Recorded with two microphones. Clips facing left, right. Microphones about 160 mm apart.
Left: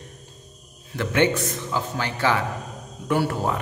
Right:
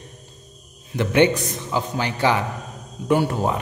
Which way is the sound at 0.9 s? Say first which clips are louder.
Right 4 dB; 20° right (ahead or behind).